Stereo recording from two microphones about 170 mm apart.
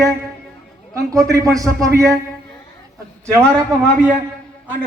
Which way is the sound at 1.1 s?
20° right (ahead or behind).